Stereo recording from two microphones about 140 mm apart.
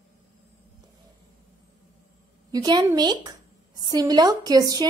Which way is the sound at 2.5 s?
30° right (ahead or behind).